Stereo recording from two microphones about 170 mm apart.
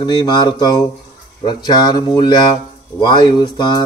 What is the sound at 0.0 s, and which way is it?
Speech, 25° left (ahead or behind).